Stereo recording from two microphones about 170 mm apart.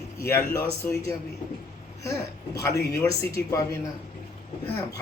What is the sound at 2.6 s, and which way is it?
A man's voice, 20° left (ahead or behind).